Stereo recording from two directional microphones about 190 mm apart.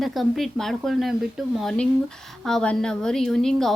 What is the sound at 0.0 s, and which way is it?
A woman's voice, centre (ahead or behind).